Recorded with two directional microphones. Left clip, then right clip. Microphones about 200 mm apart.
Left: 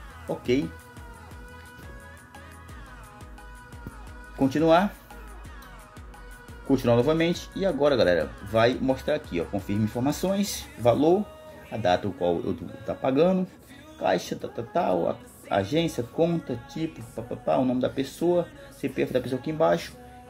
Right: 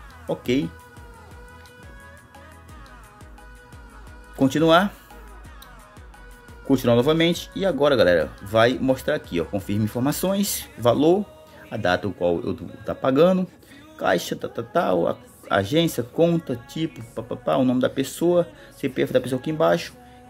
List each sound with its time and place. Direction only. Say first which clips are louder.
4.4 s speech: right 3 dB; 30° right (ahead or behind)
6.7 s speech: right 3 dB; 30° right (ahead or behind)